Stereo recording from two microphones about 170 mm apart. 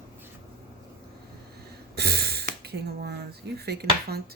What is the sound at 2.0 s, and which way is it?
Speech, 70° right (ahead or behind).